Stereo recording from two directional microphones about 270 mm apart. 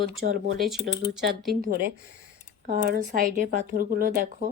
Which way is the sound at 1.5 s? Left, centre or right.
Right.